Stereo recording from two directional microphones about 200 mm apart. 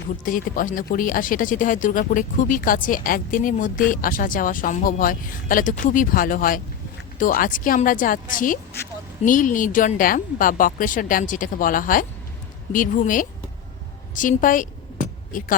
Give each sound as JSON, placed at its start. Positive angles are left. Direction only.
{"t": 0.3, "sound": "speech", "side_deg": 45}